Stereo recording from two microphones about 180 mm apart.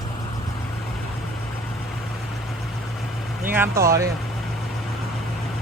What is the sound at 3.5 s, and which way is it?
Speech, 15° right (ahead or behind).